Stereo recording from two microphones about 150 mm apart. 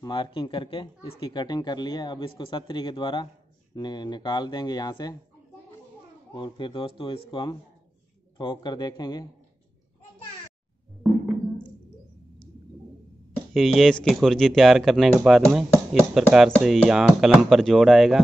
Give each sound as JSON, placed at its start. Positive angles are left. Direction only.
{"t": 0.0, "sound": "speech", "side_deg": 30}
{"t": 6.3, "sound": "speech", "side_deg": 30}
{"t": 13.5, "sound": "speech", "side_deg": 0}